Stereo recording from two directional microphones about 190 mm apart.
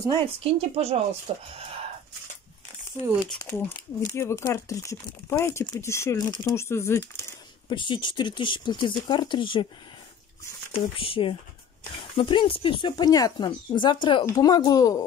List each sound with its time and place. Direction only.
0.4 s speech: 30° right (ahead or behind)
2.9 s speech: 15° right (ahead or behind)
3.3 s speech: 10° left (ahead or behind)
7.7 s speech: 25° left (ahead or behind)
11.0 s speech: 30° left (ahead or behind)